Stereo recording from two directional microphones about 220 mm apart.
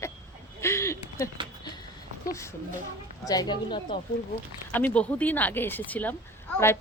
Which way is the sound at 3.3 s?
20° left (ahead or behind).